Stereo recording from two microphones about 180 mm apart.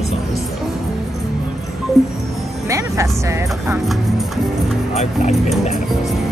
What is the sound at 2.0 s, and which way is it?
Music, centre (ahead or behind).